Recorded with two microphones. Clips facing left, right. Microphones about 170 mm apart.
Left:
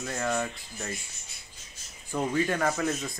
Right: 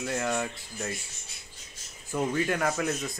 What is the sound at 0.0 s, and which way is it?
Speech, 5° right (ahead or behind).